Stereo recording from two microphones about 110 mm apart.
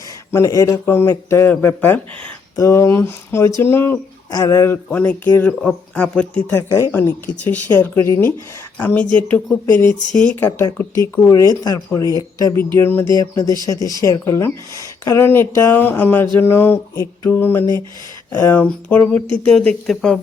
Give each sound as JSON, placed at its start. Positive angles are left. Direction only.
{"t": 0.3, "sound": "speech", "side_deg": 25}
{"t": 2.6, "sound": "speech", "side_deg": 25}
{"t": 4.3, "sound": "speech", "side_deg": 35}
{"t": 4.9, "sound": "speech", "side_deg": 15}
{"t": 6.6, "sound": "speech", "side_deg": 30}
{"t": 6.9, "sound": "speech", "side_deg": 15}
{"t": 12.7, "sound": "speech", "side_deg": 20}
{"t": 13.1, "sound": "speech", "side_deg": 35}